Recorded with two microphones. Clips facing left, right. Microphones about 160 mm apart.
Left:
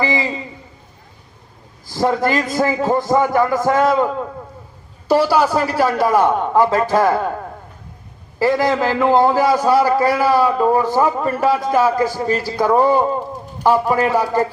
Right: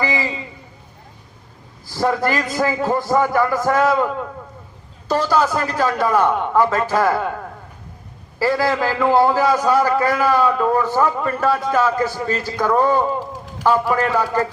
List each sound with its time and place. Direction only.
0.0 s a sound: 20° left (ahead or behind)
1.9 s a man's voice: 20° left (ahead or behind)
6.7 s a man's voice: 25° left (ahead or behind)
8.4 s a man's voice: 20° left (ahead or behind)